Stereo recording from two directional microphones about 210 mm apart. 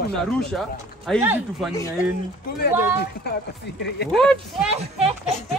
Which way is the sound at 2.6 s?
50° left (ahead or behind).